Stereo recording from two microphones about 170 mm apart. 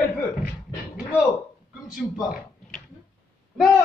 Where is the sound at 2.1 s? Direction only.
5° right (ahead or behind).